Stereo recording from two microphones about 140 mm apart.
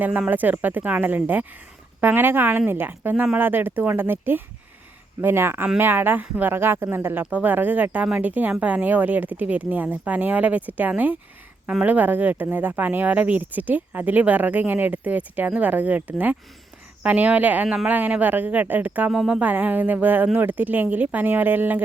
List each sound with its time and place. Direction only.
0.0 s speech: 10° right (ahead or behind)